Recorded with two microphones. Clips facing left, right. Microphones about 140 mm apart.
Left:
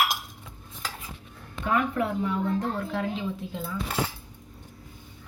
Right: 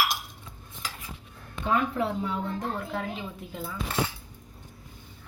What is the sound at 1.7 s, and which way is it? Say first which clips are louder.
Speech: left 1 dB; 30° right (ahead or behind).